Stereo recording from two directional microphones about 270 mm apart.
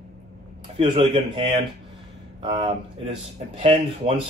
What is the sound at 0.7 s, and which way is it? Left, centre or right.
Speech, centre.